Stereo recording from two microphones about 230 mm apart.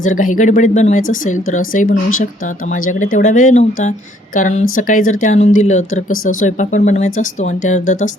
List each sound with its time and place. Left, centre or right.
0.0 s speech: left
3.0 s speech: left